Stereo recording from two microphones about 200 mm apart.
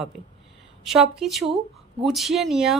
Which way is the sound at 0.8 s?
Centre (ahead or behind).